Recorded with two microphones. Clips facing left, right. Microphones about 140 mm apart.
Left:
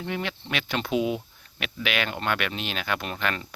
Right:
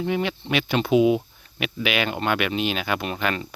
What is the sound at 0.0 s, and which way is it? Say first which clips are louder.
Speech: right 6 dB; 5° right (ahead or behind).